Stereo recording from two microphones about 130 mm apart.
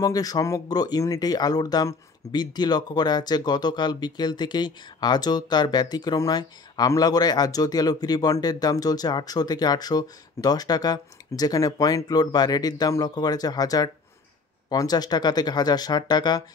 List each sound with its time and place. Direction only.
0.0 s speech: 30° left (ahead or behind)